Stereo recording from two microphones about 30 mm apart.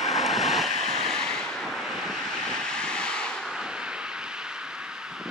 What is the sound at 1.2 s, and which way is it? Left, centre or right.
Vehicle, centre.